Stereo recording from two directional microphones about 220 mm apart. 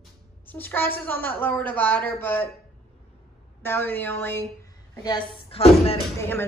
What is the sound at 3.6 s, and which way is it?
Speech, 10° left (ahead or behind).